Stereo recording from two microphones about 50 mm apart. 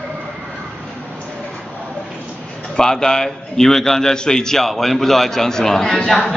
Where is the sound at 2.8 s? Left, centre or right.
Centre.